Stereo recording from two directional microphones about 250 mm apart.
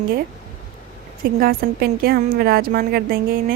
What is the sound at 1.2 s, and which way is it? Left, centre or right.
A woman's voice, right.